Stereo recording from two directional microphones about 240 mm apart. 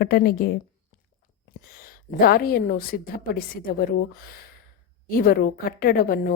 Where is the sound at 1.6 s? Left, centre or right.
Left.